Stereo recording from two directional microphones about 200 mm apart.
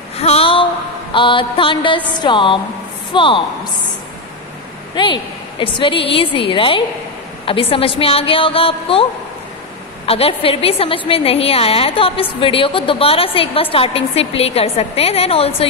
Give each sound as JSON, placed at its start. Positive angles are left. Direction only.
{"t": 0.2, "sound": "a sound", "side_deg": 30}
{"t": 1.1, "sound": "a woman's voice", "side_deg": 25}
{"t": 4.9, "sound": "a woman's voice", "side_deg": 25}
{"t": 10.0, "sound": "a woman's voice", "side_deg": 30}